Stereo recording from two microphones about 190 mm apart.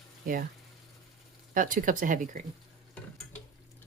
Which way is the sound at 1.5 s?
45° right (ahead or behind).